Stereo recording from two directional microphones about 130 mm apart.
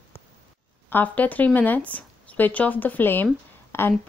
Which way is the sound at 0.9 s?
15° left (ahead or behind).